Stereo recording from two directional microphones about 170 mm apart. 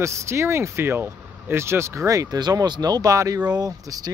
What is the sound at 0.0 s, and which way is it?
Speech, 15° right (ahead or behind).